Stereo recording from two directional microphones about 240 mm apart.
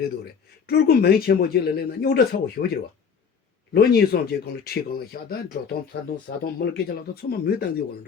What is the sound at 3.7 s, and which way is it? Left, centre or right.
Speech, left.